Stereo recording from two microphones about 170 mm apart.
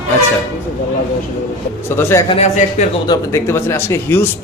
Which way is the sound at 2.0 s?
15° left (ahead or behind).